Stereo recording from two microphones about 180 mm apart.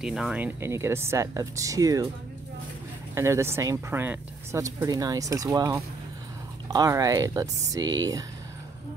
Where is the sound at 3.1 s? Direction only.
15° right (ahead or behind).